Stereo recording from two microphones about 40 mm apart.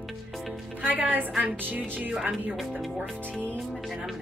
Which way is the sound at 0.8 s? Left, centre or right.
Right.